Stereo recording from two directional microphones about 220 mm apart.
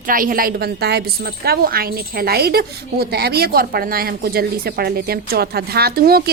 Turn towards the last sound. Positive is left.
turn(degrees=-45)  # may be behind; listen again after turning